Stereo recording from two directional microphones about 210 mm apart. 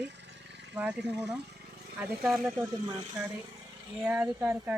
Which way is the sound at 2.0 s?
5° right (ahead or behind).